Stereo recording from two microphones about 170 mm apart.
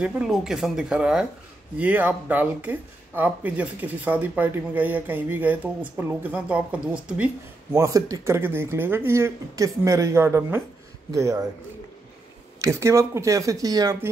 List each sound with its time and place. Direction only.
0.0 s speech: 5° right (ahead or behind)
7.7 s speech: 20° right (ahead or behind)
12.5 s speech: 20° right (ahead or behind)